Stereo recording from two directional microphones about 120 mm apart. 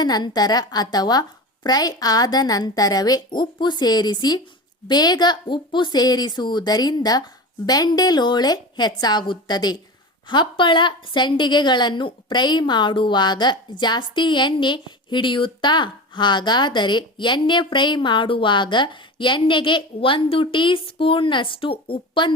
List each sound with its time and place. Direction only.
0.0 s a woman's voice: 35° left (ahead or behind)